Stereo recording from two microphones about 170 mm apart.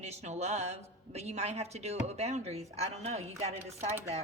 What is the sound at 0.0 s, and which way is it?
Speech, 40° right (ahead or behind).